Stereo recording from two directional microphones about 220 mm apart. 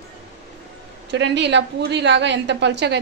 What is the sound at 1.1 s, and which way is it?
A woman's voice, 50° right (ahead or behind).